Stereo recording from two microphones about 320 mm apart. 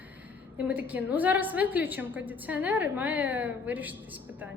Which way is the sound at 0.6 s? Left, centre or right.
Centre.